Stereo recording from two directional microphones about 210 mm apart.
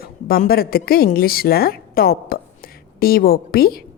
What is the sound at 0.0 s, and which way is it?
A woman's voice, 45° left (ahead or behind).